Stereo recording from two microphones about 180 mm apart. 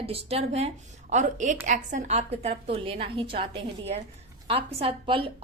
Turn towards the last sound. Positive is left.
turn(degrees=-30)  # may be behind; listen again after turning